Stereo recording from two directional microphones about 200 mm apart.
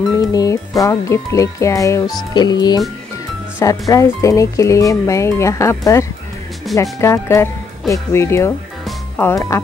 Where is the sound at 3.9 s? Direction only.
15° left (ahead or behind).